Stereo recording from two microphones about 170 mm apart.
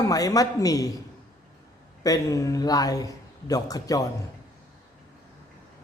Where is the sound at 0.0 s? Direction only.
20° left (ahead or behind).